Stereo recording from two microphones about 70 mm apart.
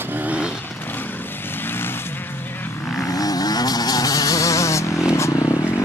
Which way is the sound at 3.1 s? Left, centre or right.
Left.